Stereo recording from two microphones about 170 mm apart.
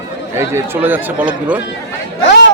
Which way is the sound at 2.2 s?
90° left.